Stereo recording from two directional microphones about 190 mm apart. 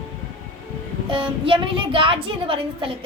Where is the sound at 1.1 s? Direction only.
25° right (ahead or behind).